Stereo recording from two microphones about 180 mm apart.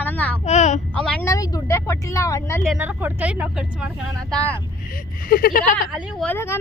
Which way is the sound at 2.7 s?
10° right (ahead or behind).